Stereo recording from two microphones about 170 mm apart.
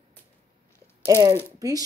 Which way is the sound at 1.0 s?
15° right (ahead or behind).